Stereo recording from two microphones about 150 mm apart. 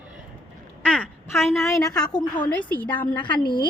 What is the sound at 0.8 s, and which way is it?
Speech, 10° left (ahead or behind).